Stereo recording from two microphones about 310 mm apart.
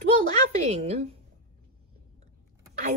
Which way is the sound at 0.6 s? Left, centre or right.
Centre.